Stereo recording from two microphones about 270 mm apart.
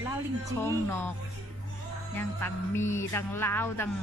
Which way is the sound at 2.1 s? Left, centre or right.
Centre.